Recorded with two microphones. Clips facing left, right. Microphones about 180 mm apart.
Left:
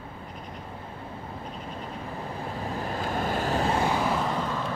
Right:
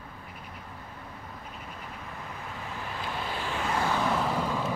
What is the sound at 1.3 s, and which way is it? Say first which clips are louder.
Vehicle: left 6 dB; 30° left (ahead or behind).